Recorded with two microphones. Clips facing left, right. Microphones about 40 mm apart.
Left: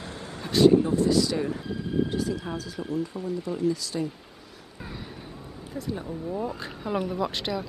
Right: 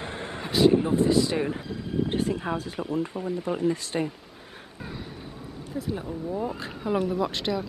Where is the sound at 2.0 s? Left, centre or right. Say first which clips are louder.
Right 2 dB; right.